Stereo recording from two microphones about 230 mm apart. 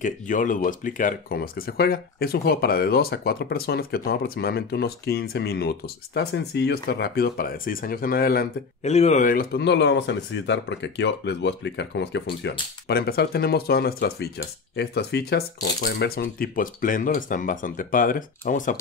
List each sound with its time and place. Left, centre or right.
0.0 s speech: left